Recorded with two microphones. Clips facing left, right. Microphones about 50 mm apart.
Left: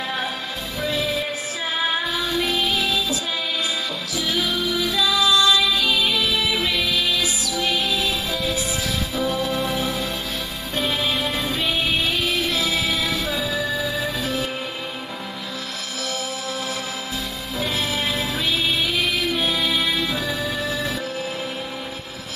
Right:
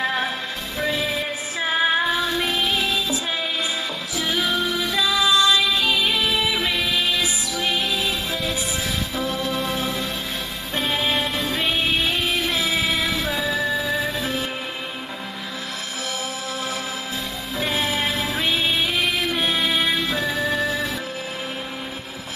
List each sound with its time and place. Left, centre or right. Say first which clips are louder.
0.7 s music: even; right
4.2 s music: right 1 dB; right
9.2 s music: left 3 dB; centre
9.7 s music: left 1 dB; right
11.2 s music: even; centre
11.5 s music: right 2 dB; right
14.2 s music: left 1 dB; right
17.6 s music: right 1 dB; right